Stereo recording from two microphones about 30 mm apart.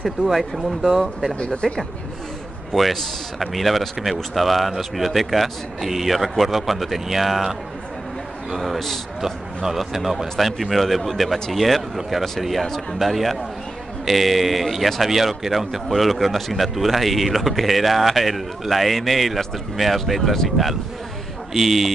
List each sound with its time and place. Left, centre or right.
0.3 s speech: centre
1.4 s speech: left
2.7 s speech: centre
8.5 s speech: centre
9.9 s speech: centre